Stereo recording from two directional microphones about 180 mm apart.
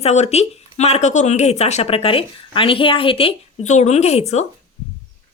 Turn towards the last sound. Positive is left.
turn(degrees=35)  # may be behind; listen again after turning